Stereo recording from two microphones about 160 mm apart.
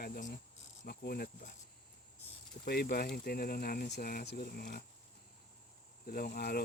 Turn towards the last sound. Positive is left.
turn(degrees=75)  # may be behind; listen again after turning